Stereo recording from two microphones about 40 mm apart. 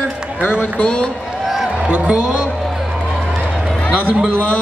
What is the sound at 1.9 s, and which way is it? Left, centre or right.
Speech, right.